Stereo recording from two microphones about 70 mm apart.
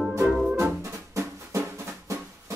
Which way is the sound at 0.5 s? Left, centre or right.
Right.